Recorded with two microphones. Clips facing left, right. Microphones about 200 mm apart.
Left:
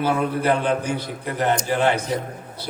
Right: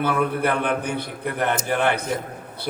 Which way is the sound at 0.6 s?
60° right (ahead or behind).